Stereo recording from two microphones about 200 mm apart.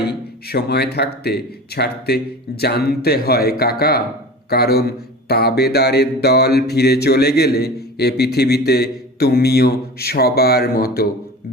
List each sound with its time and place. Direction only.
0.1 s mantra: 55° left (ahead or behind)
4.4 s a man's voice: 50° left (ahead or behind)
5.3 s mantra: 55° left (ahead or behind)